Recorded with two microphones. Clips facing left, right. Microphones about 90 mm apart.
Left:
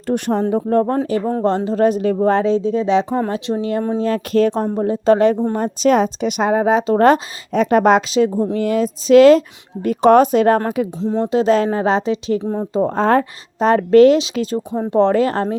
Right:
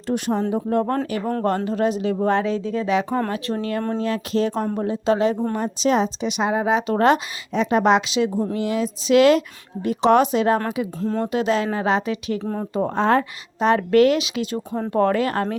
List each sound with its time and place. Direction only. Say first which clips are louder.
0.1 s a woman's voice: left 4 dB; 50° left (ahead or behind); by 1.8 s 25° left (ahead or behind)
1.8 s speech: left 7 dB; 45° left (ahead or behind); by 4.0 s 15° left (ahead or behind)
4.0 s a woman's voice: left 8 dB; 45° left (ahead or behind)
4.5 s speech: left 5 dB; 25° left (ahead or behind)
5.0 s a woman's voice: left 6 dB; 50° left (ahead or behind)
11.0 s speech: left 6 dB; 20° left (ahead or behind)
12.9 s a woman's voice: left 2 dB; 40° left (ahead or behind)
14.7 s speech: left 5 dB; 20° left (ahead or behind)